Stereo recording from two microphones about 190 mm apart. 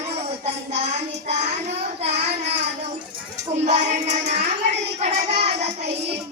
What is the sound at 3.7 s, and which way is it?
Child singing, 35° right (ahead or behind).